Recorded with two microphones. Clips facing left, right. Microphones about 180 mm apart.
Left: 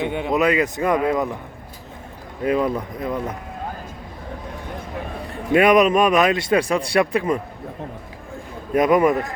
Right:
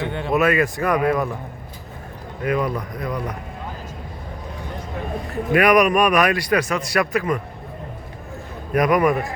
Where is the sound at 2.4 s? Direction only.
30° left (ahead or behind).